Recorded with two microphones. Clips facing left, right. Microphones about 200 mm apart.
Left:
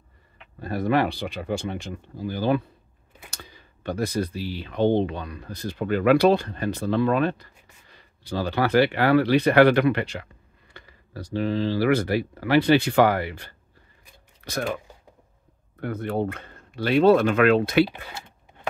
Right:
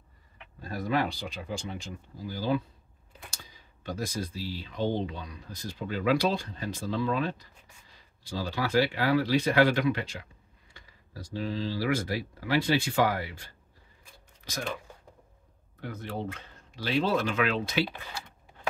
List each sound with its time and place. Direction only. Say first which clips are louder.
0.6 s speech: left 7 dB; 65° left (ahead or behind)
15.8 s speech: left 9 dB; 55° left (ahead or behind)